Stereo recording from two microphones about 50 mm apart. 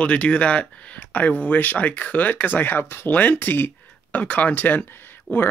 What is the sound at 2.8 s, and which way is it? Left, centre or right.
Speech, left.